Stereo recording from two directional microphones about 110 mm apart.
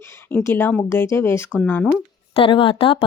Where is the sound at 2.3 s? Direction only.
55° left (ahead or behind).